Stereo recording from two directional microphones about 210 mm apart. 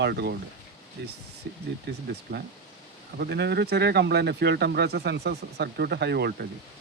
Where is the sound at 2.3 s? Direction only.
50° right (ahead or behind).